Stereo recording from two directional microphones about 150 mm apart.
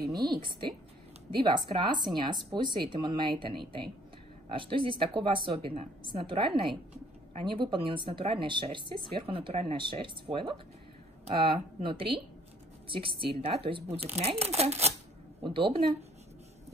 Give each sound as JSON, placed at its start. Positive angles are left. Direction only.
{"t": 0.1, "sound": "speech", "side_deg": -25}
{"t": 15.4, "sound": "speech", "side_deg": -35}